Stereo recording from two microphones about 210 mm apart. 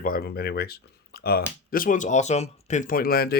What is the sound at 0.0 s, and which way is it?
Speech, 45° left (ahead or behind).